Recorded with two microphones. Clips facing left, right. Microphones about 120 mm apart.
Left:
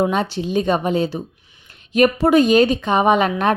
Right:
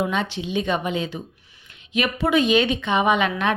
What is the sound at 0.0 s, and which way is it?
A woman's voice, 40° left (ahead or behind).